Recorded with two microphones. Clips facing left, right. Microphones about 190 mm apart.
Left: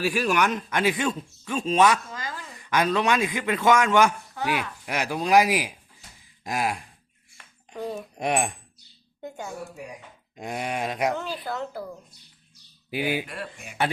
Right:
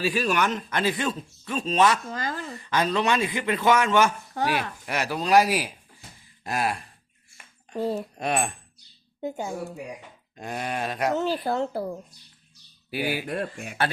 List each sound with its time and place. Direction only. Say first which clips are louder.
0.0 s speech: left 1 dB; 10° left (ahead or behind)
2.2 s chop: right 5 dB; 45° right (ahead or behind)
2.6 s speech: left 2 dB; 10° left (ahead or behind)
8.1 s speech: left 1 dB; 15° left (ahead or behind)
9.2 s speech: right 5 dB; 25° right (ahead or behind)
10.3 s speech: left 1 dB; 15° left (ahead or behind)
11.2 s speech: right 6 dB; 30° right (ahead or behind)
12.9 s speech: left 1 dB; 20° left (ahead or behind)
13.2 s speech: right 7 dB; 45° right (ahead or behind)